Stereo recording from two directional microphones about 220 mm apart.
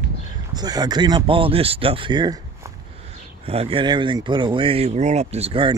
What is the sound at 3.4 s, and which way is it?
Speech, 25° right (ahead or behind).